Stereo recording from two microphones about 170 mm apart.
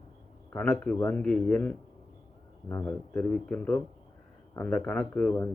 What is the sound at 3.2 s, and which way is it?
Speech, 5° left (ahead or behind).